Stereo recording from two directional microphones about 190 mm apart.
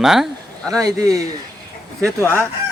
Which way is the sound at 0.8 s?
20° right (ahead or behind).